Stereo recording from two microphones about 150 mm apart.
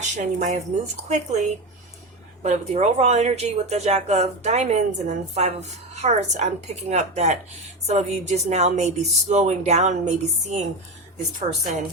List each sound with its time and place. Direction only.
0.0 s speech: 50° right (ahead or behind)